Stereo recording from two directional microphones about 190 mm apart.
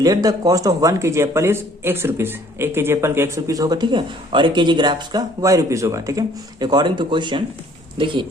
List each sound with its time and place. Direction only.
0.0 s a man's voice: 20° right (ahead or behind)